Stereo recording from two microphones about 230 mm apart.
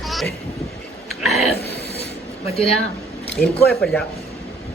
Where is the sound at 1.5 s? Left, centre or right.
Left.